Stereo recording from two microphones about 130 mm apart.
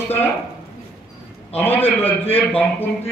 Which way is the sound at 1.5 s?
15° left (ahead or behind).